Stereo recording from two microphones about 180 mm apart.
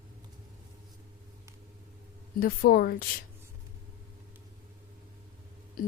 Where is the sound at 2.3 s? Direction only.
55° left (ahead or behind).